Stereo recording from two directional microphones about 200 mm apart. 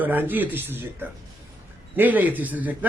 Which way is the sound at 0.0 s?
10° right (ahead or behind).